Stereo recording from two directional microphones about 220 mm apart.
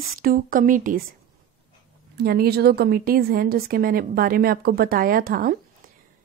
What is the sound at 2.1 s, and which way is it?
A woman's voice, 45° right (ahead or behind).